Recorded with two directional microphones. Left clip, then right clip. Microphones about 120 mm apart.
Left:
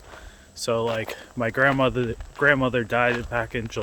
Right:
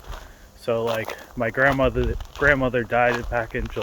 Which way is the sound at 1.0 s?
35° left (ahead or behind).